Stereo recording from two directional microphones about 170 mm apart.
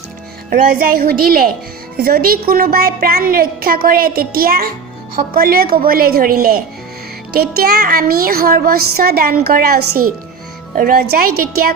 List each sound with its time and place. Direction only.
0.5 s a woman's voice: 55° right (ahead or behind)